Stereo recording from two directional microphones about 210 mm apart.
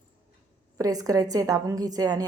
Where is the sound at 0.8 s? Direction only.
15° right (ahead or behind).